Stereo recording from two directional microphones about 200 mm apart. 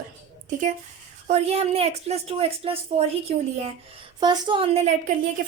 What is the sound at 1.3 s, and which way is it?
A woman's voice, 30° right (ahead or behind).